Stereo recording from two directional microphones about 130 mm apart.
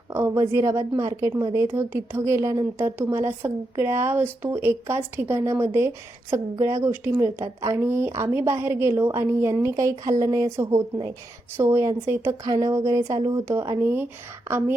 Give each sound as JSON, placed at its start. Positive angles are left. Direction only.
{"t": 0.1, "sound": "a woman's voice", "side_deg": -20}
{"t": 11.5, "sound": "speech", "side_deg": -20}